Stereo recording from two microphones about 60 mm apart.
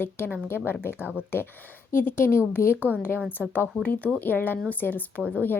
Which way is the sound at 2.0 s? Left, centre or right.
Left.